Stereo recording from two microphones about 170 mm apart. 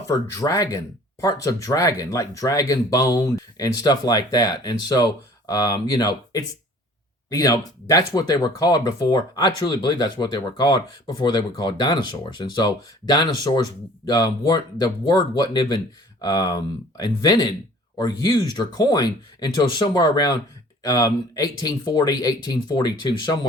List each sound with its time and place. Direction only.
0.1 s speech: 20° left (ahead or behind)